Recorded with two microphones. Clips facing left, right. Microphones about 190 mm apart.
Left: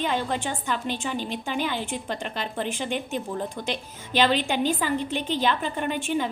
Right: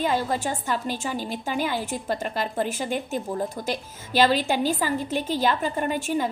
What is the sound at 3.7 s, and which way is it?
A woman's voice, 40° right (ahead or behind).